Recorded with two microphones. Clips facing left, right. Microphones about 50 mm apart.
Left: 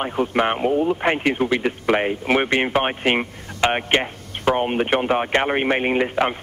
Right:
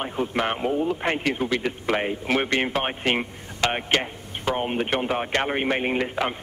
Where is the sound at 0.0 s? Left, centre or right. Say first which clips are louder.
Left 5 dB; centre.